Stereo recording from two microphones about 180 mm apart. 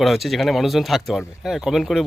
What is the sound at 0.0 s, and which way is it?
Speech, centre (ahead or behind).